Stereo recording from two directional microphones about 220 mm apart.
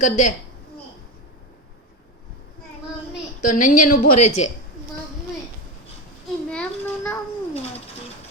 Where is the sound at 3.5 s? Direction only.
35° left (ahead or behind).